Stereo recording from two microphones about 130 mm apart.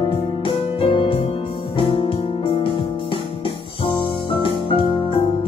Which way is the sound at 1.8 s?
45° left (ahead or behind).